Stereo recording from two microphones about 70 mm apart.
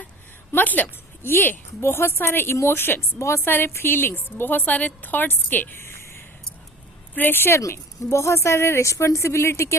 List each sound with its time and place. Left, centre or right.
0.5 s a woman's voice: left